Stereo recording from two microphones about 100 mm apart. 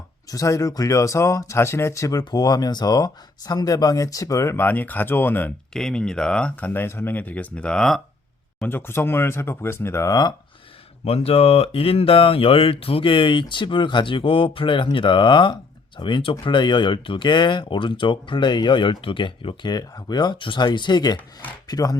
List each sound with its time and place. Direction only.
0.3 s speech: 35° left (ahead or behind)
4.6 s speech: 20° left (ahead or behind)
5.7 s speech: 5° left (ahead or behind)
8.6 s speech: 20° left (ahead or behind)
11.0 s speech: 90° left; by 19.7 s 55° left (ahead or behind)
19.7 s speech: 40° left (ahead or behind)